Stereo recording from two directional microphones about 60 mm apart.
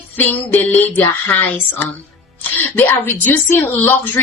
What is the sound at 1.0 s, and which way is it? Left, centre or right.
Speech, left.